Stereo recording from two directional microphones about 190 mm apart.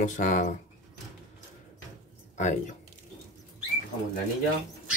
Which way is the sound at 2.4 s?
40° left (ahead or behind).